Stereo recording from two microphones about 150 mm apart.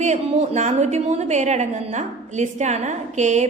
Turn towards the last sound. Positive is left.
turn(degrees=-50)  # may be behind; listen again after turning